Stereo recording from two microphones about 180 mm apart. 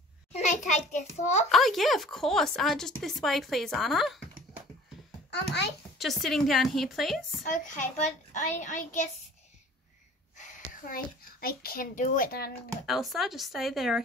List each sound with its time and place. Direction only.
0.3 s a child's voice: 40° left (ahead or behind)
1.5 s speech: centre (ahead or behind)
5.3 s a child's voice: 70° left (ahead or behind)
5.9 s speech: centre (ahead or behind)
7.4 s a child's voice: 45° left (ahead or behind)
10.9 s a child's voice: 55° left (ahead or behind)
12.8 s speech: centre (ahead or behind)